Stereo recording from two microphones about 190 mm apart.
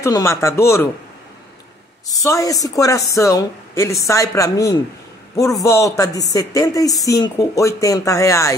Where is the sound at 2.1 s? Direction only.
15° left (ahead or behind).